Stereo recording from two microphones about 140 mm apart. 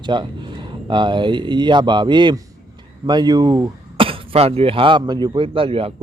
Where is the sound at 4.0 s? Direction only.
45° right (ahead or behind).